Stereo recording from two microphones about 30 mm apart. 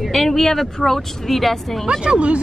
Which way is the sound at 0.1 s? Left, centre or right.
Centre.